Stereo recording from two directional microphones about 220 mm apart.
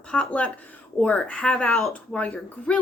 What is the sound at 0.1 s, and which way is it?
A woman's voice, 5° left (ahead or behind).